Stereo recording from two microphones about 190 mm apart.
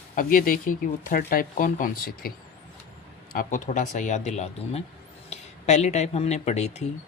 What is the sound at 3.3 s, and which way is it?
A woman's voice, 45° left (ahead or behind).